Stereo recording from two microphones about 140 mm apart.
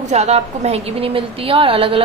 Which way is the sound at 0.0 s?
50° right (ahead or behind).